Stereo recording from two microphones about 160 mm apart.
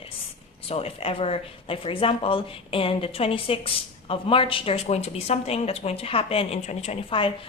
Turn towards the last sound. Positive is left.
turn(degrees=35)  # may be behind; listen again after turning